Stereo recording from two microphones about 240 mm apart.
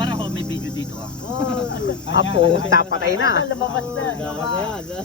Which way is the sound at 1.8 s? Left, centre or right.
Left.